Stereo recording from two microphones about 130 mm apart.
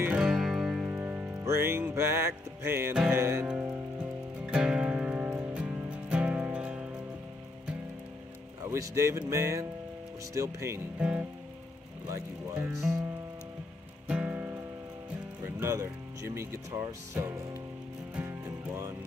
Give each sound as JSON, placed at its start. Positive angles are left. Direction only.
{"t": 0.0, "sound": "music", "side_deg": -5}
{"t": 3.4, "sound": "music", "side_deg": -5}
{"t": 8.6, "sound": "speech", "side_deg": -25}
{"t": 9.3, "sound": "music", "side_deg": -25}
{"t": 11.0, "sound": "speech", "side_deg": -10}
{"t": 12.5, "sound": "speech", "side_deg": -10}
{"t": 14.0, "sound": "music", "side_deg": -10}
{"t": 15.6, "sound": "speech", "side_deg": -25}